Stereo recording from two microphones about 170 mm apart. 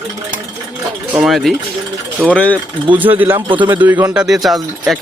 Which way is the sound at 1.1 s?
5° right (ahead or behind).